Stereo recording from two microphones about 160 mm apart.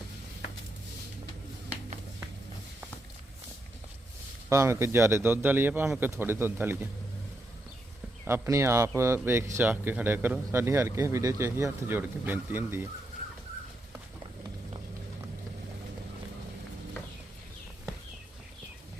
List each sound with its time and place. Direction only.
4.4 s speech: 20° right (ahead or behind)
8.2 s speech: 15° right (ahead or behind)